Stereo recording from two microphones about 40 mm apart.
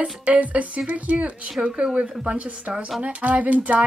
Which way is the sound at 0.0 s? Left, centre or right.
Right.